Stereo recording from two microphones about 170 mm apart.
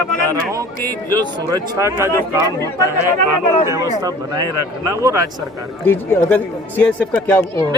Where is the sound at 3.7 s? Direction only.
20° right (ahead or behind).